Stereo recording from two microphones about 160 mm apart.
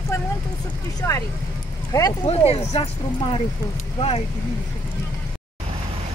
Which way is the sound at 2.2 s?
40° left (ahead or behind).